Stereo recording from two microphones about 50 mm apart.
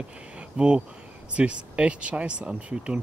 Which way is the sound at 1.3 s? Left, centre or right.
Right.